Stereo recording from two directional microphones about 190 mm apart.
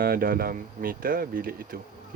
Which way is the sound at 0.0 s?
50° right (ahead or behind).